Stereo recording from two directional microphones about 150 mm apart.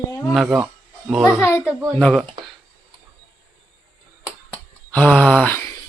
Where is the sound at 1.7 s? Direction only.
5° right (ahead or behind).